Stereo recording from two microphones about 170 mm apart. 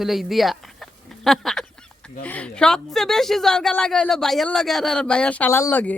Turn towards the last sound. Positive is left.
turn(degrees=10)  # may be behind; listen again after turning